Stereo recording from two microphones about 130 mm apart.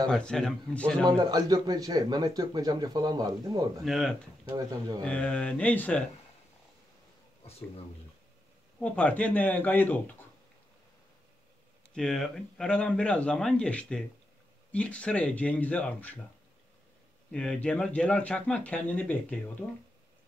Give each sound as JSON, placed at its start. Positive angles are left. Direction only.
{"t": 0.1, "sound": "a man's voice", "side_deg": 5}
{"t": 1.0, "sound": "a man's voice", "side_deg": -30}
{"t": 3.8, "sound": "a man's voice", "side_deg": 0}
{"t": 4.5, "sound": "a man's voice", "side_deg": -30}
{"t": 5.0, "sound": "speech", "side_deg": 10}
{"t": 8.7, "sound": "speech", "side_deg": 10}
{"t": 11.9, "sound": "speech", "side_deg": 5}
{"t": 17.3, "sound": "speech", "side_deg": 5}